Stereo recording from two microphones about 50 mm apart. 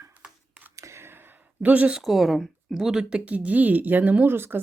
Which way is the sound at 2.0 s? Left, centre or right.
Centre.